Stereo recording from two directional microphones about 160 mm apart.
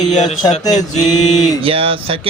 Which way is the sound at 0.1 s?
45° left (ahead or behind).